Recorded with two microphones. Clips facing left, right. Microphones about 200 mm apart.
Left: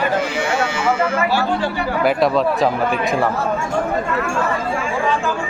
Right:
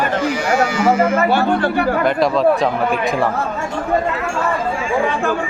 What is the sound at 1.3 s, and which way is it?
Speech, 55° right (ahead or behind).